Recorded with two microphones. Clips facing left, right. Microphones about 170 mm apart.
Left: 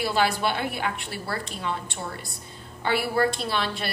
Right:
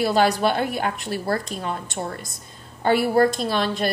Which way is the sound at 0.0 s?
40° right (ahead or behind).